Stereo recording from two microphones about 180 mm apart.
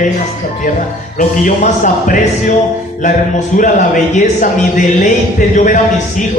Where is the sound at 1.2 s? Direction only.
45° left (ahead or behind).